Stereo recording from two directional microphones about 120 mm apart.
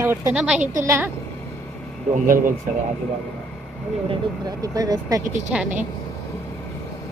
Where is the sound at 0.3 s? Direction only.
10° right (ahead or behind).